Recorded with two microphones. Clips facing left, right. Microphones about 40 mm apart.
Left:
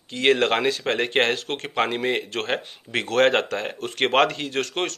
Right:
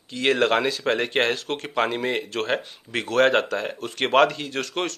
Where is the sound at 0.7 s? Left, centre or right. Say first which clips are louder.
Even; left.